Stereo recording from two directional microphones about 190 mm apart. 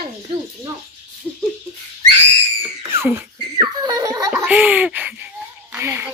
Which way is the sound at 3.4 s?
20° right (ahead or behind).